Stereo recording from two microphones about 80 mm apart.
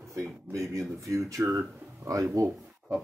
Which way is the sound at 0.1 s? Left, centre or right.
Right.